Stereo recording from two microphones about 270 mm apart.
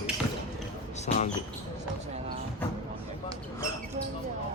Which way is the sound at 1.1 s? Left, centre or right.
Left.